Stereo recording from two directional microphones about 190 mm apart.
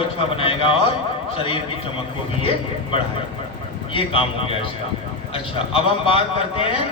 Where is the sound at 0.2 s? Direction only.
30° left (ahead or behind).